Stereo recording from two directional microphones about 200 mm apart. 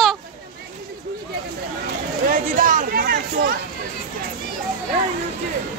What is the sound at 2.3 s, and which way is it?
Chatter, 45° right (ahead or behind).